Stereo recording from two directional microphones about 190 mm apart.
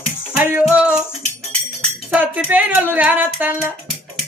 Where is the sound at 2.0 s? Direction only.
10° right (ahead or behind).